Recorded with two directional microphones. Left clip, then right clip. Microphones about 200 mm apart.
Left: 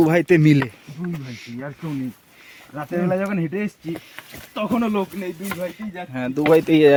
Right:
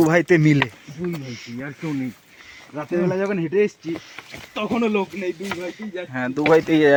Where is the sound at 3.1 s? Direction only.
40° left (ahead or behind).